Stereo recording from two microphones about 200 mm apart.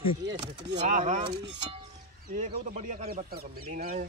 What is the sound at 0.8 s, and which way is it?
Speech, 35° right (ahead or behind).